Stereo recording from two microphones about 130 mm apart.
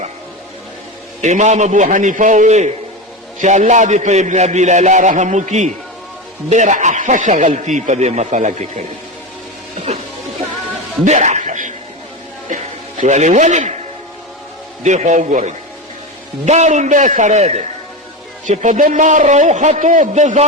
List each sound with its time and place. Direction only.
1.2 s a man's voice: 65° right (ahead or behind)
9.7 s music: 55° right (ahead or behind)
11.0 s chuckle: 65° right (ahead or behind)
12.5 s a man's voice: 70° right (ahead or behind)
14.8 s a man's voice: 65° right (ahead or behind)